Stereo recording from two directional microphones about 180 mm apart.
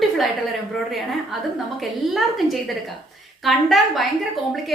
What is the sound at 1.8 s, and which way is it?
A woman's voice, centre (ahead or behind).